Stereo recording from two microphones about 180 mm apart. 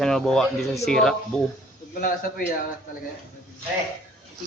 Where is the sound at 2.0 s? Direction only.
50° left (ahead or behind).